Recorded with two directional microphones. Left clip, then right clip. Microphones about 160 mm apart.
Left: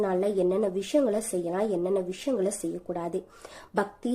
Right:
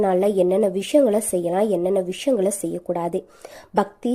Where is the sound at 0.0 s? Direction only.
35° right (ahead or behind).